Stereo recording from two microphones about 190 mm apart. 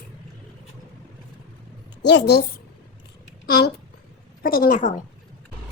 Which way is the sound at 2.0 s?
65° left (ahead or behind).